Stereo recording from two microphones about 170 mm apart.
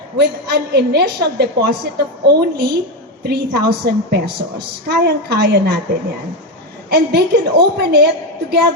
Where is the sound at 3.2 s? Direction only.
70° right (ahead or behind).